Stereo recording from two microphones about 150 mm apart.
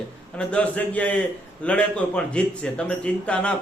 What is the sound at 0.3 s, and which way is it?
A man's voice, 10° left (ahead or behind).